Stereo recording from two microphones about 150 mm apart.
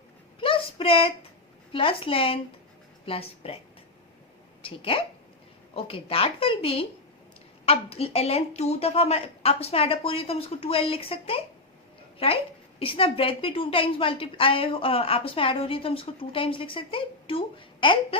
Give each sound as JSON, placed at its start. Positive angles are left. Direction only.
{"t": 0.3, "sound": "a sound", "side_deg": 35}
{"t": 1.7, "sound": "a woman's voice", "side_deg": 35}
{"t": 4.6, "sound": "a woman's voice", "side_deg": 35}
{"t": 12.8, "sound": "a woman's voice", "side_deg": 40}